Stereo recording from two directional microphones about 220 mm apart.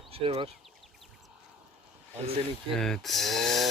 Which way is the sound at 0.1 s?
25° right (ahead or behind).